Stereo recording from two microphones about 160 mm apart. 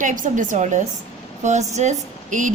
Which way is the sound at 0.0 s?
55° right (ahead or behind).